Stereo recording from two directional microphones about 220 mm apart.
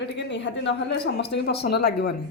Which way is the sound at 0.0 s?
55° left (ahead or behind).